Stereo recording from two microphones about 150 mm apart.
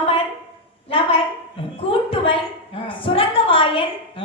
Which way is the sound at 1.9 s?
35° left (ahead or behind).